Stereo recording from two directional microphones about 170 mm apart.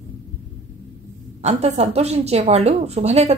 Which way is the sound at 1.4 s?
40° right (ahead or behind).